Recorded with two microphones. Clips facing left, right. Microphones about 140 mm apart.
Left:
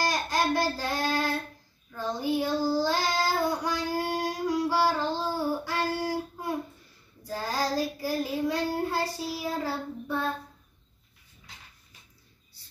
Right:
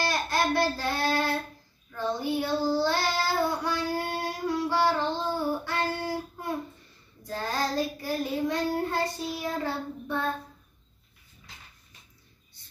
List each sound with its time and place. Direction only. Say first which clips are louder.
0.0 s child singing: even; 15° left (ahead or behind)